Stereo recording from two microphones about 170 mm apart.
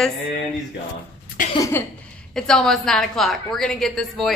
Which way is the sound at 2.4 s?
5° left (ahead or behind).